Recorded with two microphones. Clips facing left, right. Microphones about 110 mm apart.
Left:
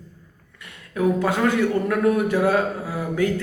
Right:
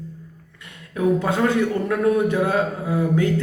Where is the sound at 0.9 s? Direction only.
25° right (ahead or behind).